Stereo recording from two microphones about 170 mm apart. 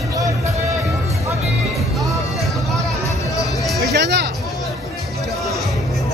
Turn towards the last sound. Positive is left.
turn(degrees=-75)  # may be behind; listen again after turning